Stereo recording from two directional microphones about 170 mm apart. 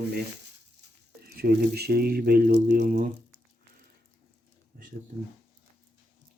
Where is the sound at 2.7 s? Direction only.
50° right (ahead or behind).